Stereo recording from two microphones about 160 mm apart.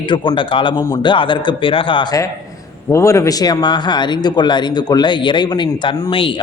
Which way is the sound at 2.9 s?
20° left (ahead or behind).